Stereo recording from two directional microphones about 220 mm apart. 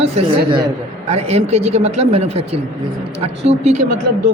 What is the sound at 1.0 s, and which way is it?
Speech, 30° right (ahead or behind).